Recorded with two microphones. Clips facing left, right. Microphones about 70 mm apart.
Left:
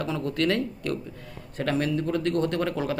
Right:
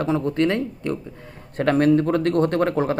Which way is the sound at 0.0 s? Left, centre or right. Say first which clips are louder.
Right 6 dB; right.